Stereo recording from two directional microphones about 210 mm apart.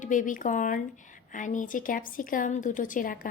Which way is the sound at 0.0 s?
40° left (ahead or behind).